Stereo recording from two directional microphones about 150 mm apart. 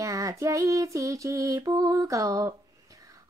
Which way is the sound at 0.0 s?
20° right (ahead or behind).